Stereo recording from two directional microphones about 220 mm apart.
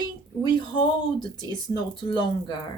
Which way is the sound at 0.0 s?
20° left (ahead or behind).